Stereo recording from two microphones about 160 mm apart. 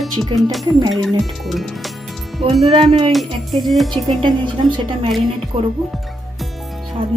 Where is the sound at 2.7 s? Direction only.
30° right (ahead or behind).